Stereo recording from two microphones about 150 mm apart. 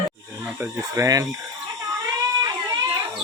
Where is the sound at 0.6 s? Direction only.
20° right (ahead or behind).